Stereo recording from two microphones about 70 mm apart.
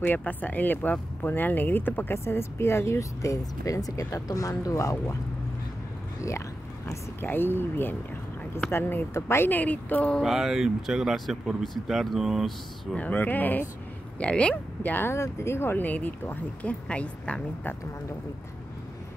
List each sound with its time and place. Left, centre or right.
0.0 s speech: left
2.1 s speech: left
7.2 s speech: left
10.2 s speech: centre
12.9 s speech: left
15.1 s speech: left; by 17.4 s centre